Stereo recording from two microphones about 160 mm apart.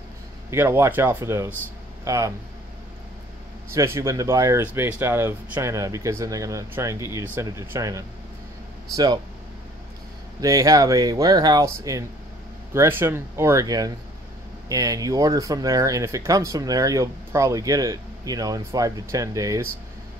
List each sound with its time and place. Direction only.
0.5 s speech: 15° right (ahead or behind)
3.7 s speech: 15° right (ahead or behind)
10.4 s speech: 20° right (ahead or behind)